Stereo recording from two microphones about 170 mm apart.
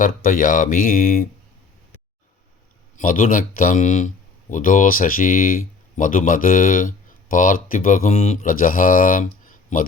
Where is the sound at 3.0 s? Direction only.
50° left (ahead or behind).